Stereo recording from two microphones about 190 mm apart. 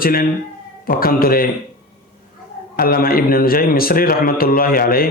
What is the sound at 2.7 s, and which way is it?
A man's voice, 50° left (ahead or behind).